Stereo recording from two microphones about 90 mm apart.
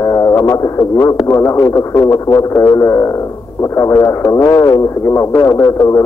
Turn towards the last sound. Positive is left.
turn(degrees=35)  # may be behind; listen again after turning